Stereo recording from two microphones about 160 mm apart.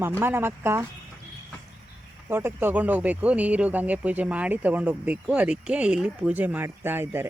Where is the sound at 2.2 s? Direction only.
15° right (ahead or behind).